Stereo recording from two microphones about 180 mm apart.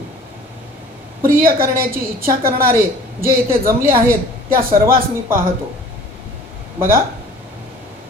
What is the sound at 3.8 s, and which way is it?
A man's voice, 55° right (ahead or behind).